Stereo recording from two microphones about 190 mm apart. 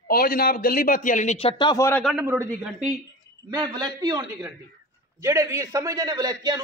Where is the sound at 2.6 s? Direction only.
5° right (ahead or behind).